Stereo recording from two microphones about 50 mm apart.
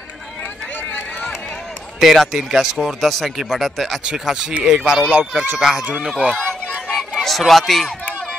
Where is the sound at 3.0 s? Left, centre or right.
Centre.